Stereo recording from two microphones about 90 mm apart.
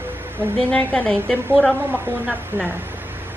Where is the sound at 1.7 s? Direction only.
25° right (ahead or behind).